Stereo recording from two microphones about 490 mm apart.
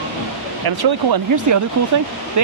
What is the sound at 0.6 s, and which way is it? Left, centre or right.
Speech, right.